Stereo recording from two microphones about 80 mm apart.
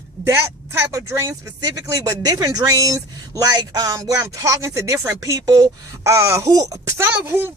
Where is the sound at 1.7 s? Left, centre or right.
Right.